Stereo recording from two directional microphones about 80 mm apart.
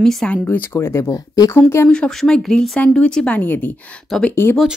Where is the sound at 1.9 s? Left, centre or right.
Centre; by 4.6 s left.